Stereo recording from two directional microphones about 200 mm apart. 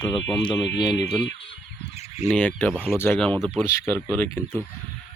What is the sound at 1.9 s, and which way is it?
Fowl, 35° left (ahead or behind).